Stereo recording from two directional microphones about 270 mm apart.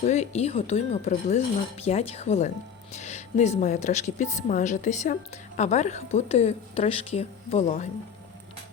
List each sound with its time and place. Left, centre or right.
0.0 s a woman's voice: left